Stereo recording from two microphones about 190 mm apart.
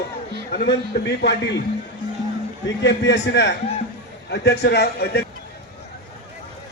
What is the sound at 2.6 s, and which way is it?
Speech, 70° left (ahead or behind).